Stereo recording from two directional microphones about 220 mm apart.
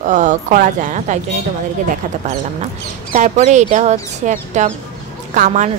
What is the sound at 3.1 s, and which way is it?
Speech, 35° right (ahead or behind).